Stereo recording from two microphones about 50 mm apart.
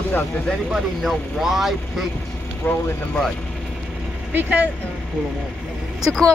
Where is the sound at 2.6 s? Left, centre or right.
Left.